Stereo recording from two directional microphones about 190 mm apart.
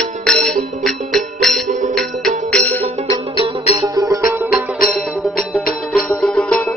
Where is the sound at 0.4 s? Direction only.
45° right (ahead or behind).